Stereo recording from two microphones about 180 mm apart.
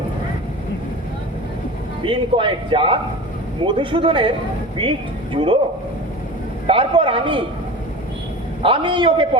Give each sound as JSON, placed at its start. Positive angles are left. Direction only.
{"t": 2.0, "sound": "a man's voice", "side_deg": -30}
{"t": 6.7, "sound": "a man's voice", "side_deg": -30}
{"t": 8.6, "sound": "a man's voice", "side_deg": -30}